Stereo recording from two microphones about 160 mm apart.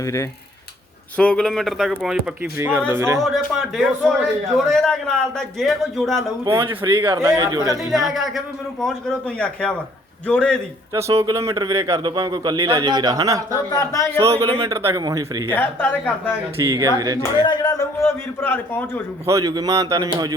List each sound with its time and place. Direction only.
0.0 s a man's voice: 20° left (ahead or behind)
1.1 s a man's voice: 5° left (ahead or behind); by 3.2 s 15° right (ahead or behind)
3.2 s a man's voice: centre (ahead or behind)
6.6 s speech: 30° right (ahead or behind)
7.0 s a man's voice: 15° right (ahead or behind)
7.8 s a man's voice: centre (ahead or behind)
10.9 s a man's voice: 20° right (ahead or behind)
13.7 s speech: 20° left (ahead or behind)
14.2 s a man's voice: 20° right (ahead or behind)
15.4 s a man's voice: 10° left (ahead or behind)
16.6 s a man's voice: 20° right (ahead or behind)
17.4 s a man's voice: 25° left (ahead or behind)
19.2 s a man's voice: 20° right (ahead or behind)